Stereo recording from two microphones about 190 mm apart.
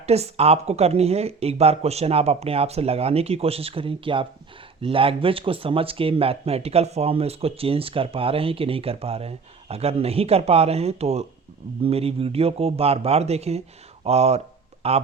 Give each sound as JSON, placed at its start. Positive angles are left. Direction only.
{"t": 0.0, "sound": "speech", "side_deg": -35}